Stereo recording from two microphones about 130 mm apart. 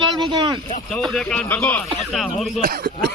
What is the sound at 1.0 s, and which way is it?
Speech, 5° left (ahead or behind).